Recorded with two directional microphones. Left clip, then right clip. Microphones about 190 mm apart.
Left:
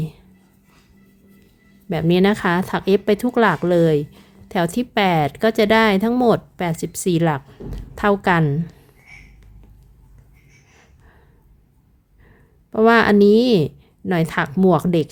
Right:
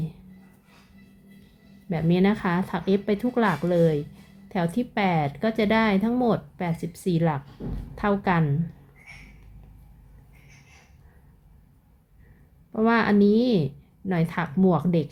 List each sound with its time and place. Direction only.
1.9 s speech: 45° left (ahead or behind)
12.7 s speech: 50° left (ahead or behind)